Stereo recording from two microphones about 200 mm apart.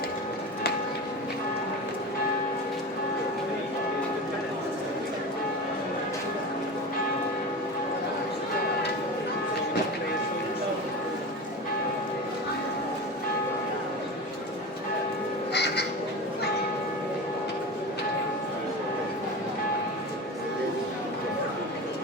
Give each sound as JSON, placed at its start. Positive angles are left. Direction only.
{"t": 15.5, "sound": "crow", "side_deg": 55}